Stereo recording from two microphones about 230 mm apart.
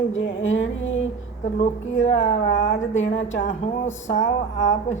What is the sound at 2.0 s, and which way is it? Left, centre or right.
Speech, left.